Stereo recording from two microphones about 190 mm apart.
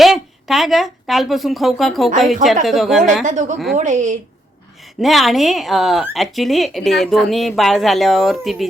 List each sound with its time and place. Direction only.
0.0 s speech: centre (ahead or behind)
3.2 s a woman's voice: 40° right (ahead or behind)
4.9 s speech: centre (ahead or behind)